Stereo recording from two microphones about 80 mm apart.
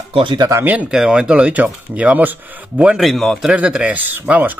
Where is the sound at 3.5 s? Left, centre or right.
Centre.